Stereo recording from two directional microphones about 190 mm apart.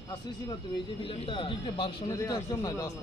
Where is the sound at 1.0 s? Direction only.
25° left (ahead or behind).